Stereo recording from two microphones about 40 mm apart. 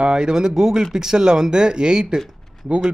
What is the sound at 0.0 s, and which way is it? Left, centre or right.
Speech, right.